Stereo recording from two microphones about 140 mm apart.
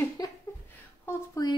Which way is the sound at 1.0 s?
25° left (ahead or behind).